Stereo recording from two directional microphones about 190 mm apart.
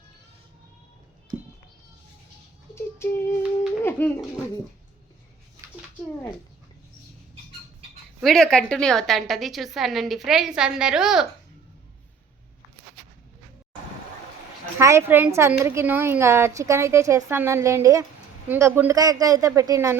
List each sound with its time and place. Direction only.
2.7 s a sound: 10° left (ahead or behind)
3.8 s speech: 10° left (ahead or behind)
8.2 s a woman's voice: centre (ahead or behind)
14.8 s a woman's voice: 15° right (ahead or behind)